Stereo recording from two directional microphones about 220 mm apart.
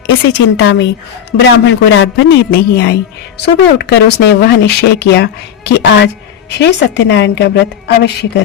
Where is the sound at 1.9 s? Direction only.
55° left (ahead or behind).